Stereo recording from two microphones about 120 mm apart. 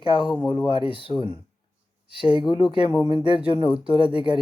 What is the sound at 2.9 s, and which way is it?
Speech, 35° left (ahead or behind).